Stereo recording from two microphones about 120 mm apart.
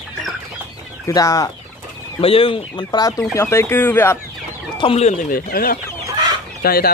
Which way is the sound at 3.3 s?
20° left (ahead or behind).